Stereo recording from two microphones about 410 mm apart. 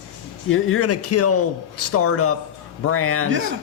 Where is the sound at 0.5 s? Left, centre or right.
Left.